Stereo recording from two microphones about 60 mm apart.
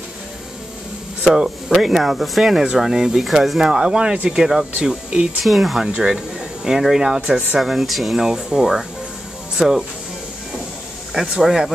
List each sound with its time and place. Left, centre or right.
1.2 s speech: centre
5.4 s speech: centre
5.8 s speech: centre
11.1 s speech: centre